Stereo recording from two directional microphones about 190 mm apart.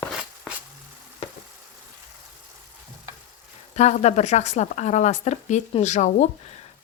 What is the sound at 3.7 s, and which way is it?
Speech, 35° left (ahead or behind).